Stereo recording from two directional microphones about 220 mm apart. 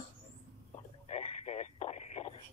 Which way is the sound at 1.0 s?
30° left (ahead or behind).